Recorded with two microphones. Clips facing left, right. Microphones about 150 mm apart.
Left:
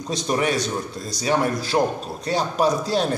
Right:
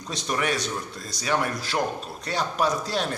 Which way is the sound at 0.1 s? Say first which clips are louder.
Left 5 dB; 35° left (ahead or behind).